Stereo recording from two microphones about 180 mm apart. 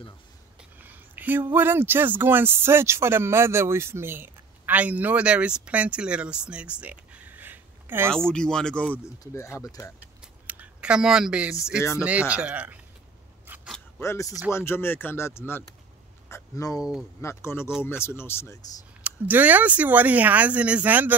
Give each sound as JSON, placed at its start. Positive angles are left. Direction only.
{"t": 0.7, "sound": "speech", "side_deg": -10}
{"t": 8.3, "sound": "speech", "side_deg": 5}
{"t": 8.9, "sound": "speech", "side_deg": 15}
{"t": 10.2, "sound": "a sound", "side_deg": -10}
{"t": 12.0, "sound": "speech", "side_deg": -5}
{"t": 13.5, "sound": "a sound", "side_deg": -10}
{"t": 13.9, "sound": "speech", "side_deg": 15}
{"t": 19.0, "sound": "speech", "side_deg": -10}